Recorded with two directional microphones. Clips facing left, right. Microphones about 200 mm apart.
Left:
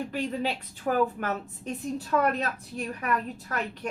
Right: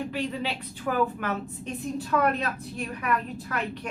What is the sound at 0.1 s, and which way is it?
A woman's voice, 45° left (ahead or behind).